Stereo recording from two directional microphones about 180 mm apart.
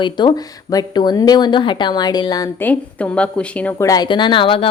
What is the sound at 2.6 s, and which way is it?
A woman's voice, 5° left (ahead or behind).